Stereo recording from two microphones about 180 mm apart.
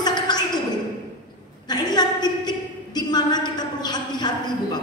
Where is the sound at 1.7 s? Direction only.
25° left (ahead or behind).